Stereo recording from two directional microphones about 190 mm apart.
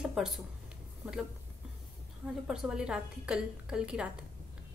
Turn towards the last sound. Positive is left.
turn(degrees=-5)  # may be behind; listen again after turning